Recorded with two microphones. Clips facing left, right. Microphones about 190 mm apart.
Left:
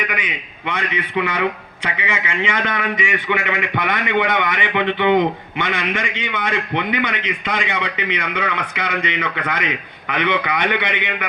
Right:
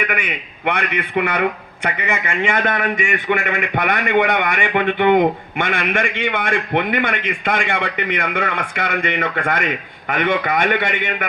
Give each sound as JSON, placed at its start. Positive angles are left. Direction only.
{"t": 0.0, "sound": "a man's voice", "side_deg": -50}